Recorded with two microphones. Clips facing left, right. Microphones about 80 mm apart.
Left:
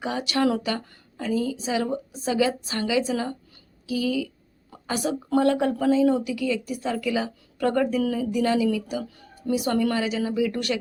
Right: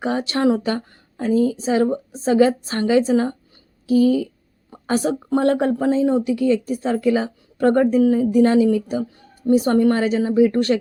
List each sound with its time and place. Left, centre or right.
0.0 s a woman's voice: right